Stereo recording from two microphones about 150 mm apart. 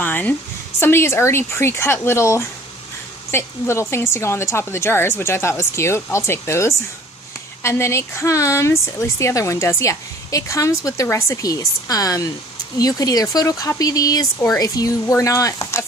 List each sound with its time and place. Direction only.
0.0 s a woman's voice: 10° left (ahead or behind)